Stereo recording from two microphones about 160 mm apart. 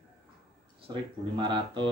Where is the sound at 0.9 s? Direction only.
30° right (ahead or behind).